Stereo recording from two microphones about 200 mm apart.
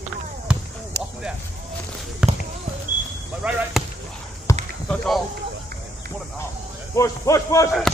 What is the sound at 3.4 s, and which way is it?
Basketball bounce, 5° right (ahead or behind).